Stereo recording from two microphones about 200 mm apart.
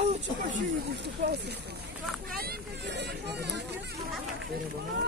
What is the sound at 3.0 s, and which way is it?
Speech, 60° right (ahead or behind).